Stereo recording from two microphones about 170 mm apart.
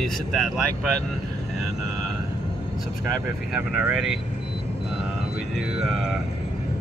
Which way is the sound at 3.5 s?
5° right (ahead or behind).